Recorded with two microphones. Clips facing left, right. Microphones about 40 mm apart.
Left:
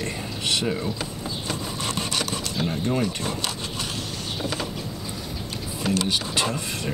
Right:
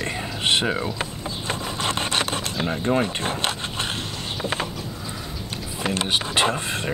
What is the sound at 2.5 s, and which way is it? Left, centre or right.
Speech, right.